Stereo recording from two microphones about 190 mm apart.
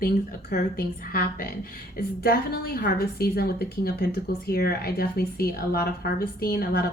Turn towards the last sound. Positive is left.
turn(degrees=50)  # may be behind; listen again after turning